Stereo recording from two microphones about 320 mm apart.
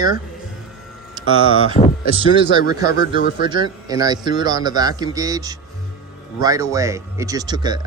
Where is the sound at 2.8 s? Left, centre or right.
Left.